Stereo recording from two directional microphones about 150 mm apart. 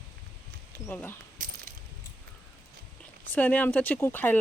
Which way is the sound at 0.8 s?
15° left (ahead or behind).